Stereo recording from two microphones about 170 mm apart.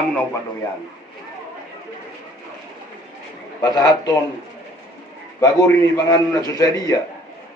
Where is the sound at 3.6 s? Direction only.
20° left (ahead or behind).